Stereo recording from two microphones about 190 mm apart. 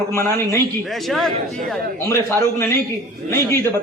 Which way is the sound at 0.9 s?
Centre (ahead or behind).